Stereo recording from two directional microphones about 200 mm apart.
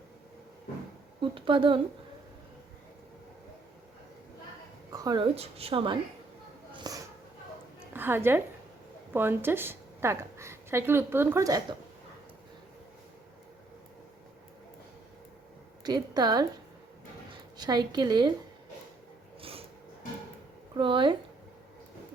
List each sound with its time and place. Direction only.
1.2 s a woman's voice: 25° right (ahead or behind)
4.9 s a woman's voice: 20° right (ahead or behind)
6.7 s a sound: 20° right (ahead or behind)
7.9 s a woman's voice: 10° right (ahead or behind)
15.8 s a woman's voice: 20° right (ahead or behind)
17.6 s a woman's voice: 20° right (ahead or behind)
19.4 s a sound: 30° right (ahead or behind)
20.7 s a woman's voice: 25° right (ahead or behind)